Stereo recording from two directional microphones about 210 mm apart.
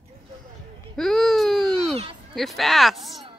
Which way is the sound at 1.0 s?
Centre (ahead or behind).